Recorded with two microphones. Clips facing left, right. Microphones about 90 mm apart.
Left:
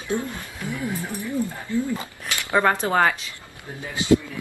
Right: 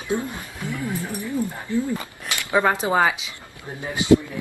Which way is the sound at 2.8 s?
10° right (ahead or behind).